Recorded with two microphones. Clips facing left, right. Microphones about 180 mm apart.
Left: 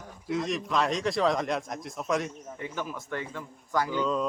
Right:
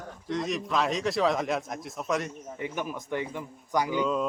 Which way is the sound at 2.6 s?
15° right (ahead or behind).